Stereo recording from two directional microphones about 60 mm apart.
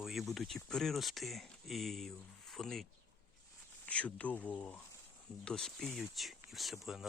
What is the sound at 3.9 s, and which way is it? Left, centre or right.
Speech, left.